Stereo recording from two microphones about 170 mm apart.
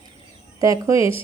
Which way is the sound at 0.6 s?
20° right (ahead or behind).